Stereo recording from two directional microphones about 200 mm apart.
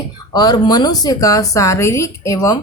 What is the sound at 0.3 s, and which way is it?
Speech, 20° left (ahead or behind).